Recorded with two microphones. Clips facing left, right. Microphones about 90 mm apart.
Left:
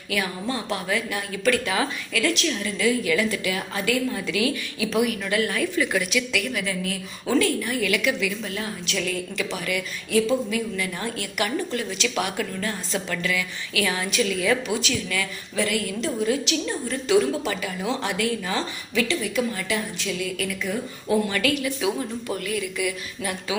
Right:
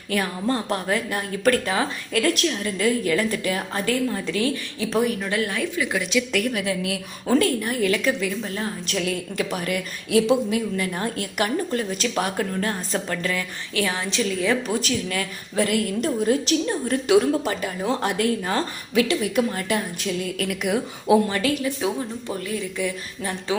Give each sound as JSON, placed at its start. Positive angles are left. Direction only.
{"t": 0.1, "sound": "a woman's voice", "side_deg": -40}
{"t": 5.2, "sound": "speech", "side_deg": -25}
{"t": 6.3, "sound": "a woman's voice", "side_deg": -50}
{"t": 7.3, "sound": "a woman's voice", "side_deg": -45}
{"t": 13.8, "sound": "speech", "side_deg": -25}
{"t": 14.8, "sound": "a woman's voice", "side_deg": -45}
{"t": 21.2, "sound": "a woman's voice", "side_deg": -30}